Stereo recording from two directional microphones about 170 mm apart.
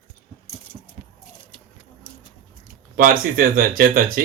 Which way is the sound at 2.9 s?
55° right (ahead or behind).